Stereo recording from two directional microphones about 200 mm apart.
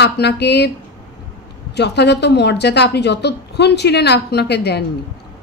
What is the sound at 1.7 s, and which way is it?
A woman's voice, 55° left (ahead or behind).